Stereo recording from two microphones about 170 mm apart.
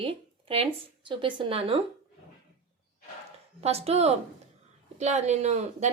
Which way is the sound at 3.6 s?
35° right (ahead or behind).